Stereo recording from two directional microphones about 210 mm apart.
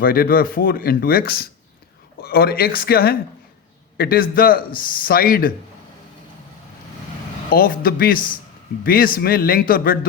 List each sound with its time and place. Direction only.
0.0 s a man's voice: 45° left (ahead or behind)
7.5 s a man's voice: 45° left (ahead or behind)